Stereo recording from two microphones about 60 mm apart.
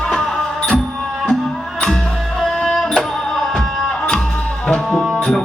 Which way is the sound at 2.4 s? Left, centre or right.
Centre.